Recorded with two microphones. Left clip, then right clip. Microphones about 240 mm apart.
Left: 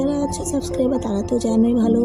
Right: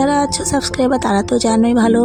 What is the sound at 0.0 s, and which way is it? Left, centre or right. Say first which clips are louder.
A woman's voice: right 7 dB; right.